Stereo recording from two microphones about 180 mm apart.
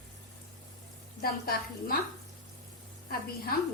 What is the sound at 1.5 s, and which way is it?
Speech, 55° left (ahead or behind).